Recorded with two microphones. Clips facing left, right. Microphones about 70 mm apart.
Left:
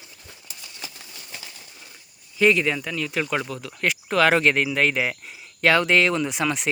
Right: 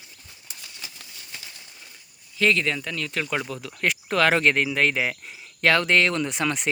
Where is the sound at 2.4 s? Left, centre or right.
Centre.